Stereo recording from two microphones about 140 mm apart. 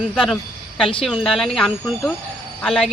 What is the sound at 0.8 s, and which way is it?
Speech, 40° left (ahead or behind).